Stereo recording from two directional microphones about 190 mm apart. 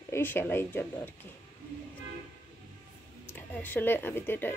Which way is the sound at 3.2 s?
10° left (ahead or behind).